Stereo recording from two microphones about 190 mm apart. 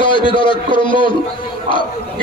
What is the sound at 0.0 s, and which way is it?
A man's voice, 25° left (ahead or behind).